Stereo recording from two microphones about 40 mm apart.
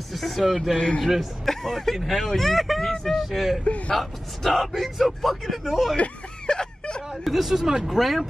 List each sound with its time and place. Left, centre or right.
0.1 s speech: centre
0.7 s a man's voice: left
1.4 s speech: centre
2.9 s a sound: centre
3.3 s speech: centre
3.6 s speech: left
3.9 s speech: centre
5.9 s a sound: left
7.2 s speech: centre